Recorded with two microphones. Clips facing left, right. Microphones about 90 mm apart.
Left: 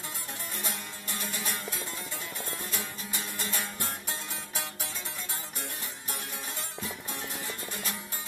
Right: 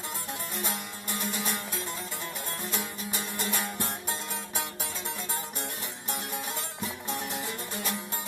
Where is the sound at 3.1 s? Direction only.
20° right (ahead or behind).